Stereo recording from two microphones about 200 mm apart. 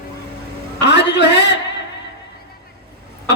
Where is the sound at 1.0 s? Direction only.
60° left (ahead or behind).